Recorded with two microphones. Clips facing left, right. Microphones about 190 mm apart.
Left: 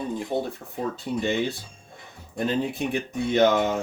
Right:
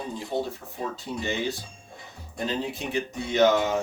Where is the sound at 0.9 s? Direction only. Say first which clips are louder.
Left 6 dB; 55° left (ahead or behind).